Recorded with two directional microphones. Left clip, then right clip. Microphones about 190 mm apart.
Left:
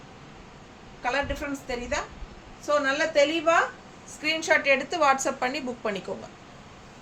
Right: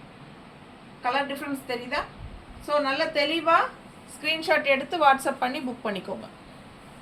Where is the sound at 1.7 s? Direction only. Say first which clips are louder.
Right 1 dB; 15° left (ahead or behind).